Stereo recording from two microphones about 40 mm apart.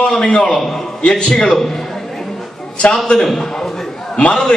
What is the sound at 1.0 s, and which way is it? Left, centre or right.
Speech, left.